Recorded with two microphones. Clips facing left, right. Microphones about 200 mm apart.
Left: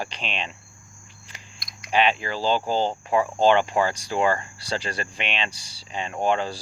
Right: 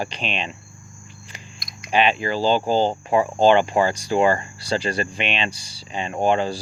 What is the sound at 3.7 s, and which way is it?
Speech, 25° right (ahead or behind).